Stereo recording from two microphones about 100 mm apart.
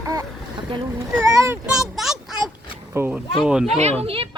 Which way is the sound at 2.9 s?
25° right (ahead or behind).